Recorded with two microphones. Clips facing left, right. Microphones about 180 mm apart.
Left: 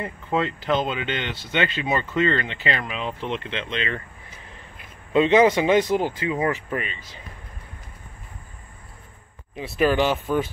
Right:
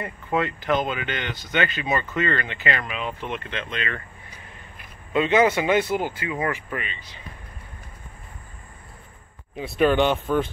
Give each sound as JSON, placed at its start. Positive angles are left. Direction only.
{"t": 0.0, "sound": "speech", "side_deg": 25}
{"t": 5.1, "sound": "speech", "side_deg": 30}
{"t": 9.6, "sound": "speech", "side_deg": 0}